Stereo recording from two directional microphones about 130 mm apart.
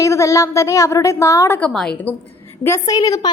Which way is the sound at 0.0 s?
25° left (ahead or behind).